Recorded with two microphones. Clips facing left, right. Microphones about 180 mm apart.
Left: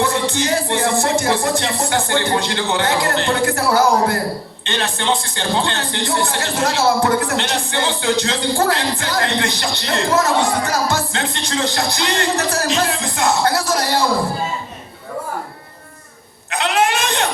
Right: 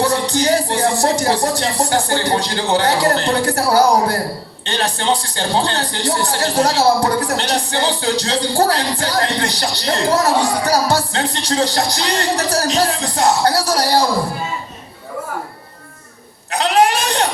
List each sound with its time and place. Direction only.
0.0 s speech: 35° right (ahead or behind)
16.5 s bleat: 35° right (ahead or behind)